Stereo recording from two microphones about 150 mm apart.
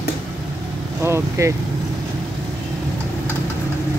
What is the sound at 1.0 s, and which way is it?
Speech, 15° right (ahead or behind).